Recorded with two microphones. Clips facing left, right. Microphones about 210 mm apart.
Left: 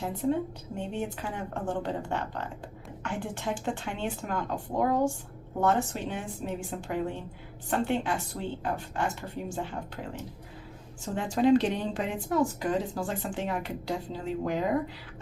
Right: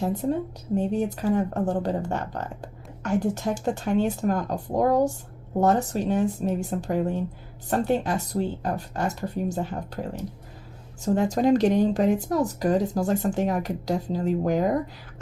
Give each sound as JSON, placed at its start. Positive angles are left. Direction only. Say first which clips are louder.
{"t": 0.2, "sound": "a woman's voice", "louder": "right 2 dB", "side_deg": -45}